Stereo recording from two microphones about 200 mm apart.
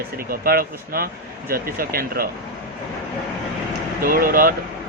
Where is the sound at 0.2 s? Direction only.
50° right (ahead or behind).